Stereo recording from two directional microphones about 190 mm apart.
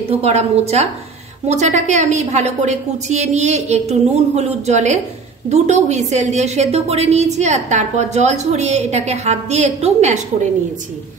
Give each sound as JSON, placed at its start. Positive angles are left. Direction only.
{"t": 0.1, "sound": "a woman's voice", "side_deg": -35}